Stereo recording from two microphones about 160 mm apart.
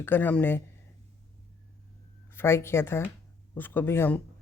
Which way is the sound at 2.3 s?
15° left (ahead or behind).